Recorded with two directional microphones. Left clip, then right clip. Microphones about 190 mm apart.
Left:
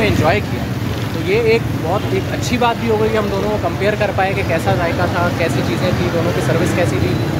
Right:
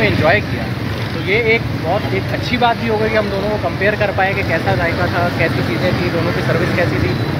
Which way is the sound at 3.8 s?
5° left (ahead or behind).